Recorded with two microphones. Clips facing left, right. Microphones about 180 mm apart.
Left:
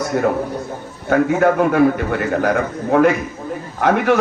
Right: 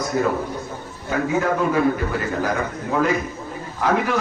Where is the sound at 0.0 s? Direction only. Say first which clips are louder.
Left 3 dB; 65° left (ahead or behind).